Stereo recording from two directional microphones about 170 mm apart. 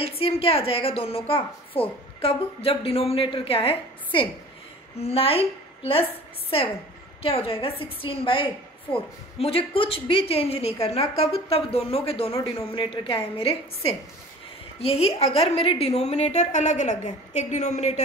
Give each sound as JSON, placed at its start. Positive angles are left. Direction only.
{"t": 0.0, "sound": "a woman's voice", "side_deg": 35}